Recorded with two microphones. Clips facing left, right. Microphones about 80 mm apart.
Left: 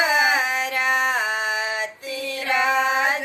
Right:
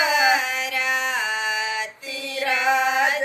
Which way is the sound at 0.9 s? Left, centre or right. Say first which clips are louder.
Left 4 dB; left.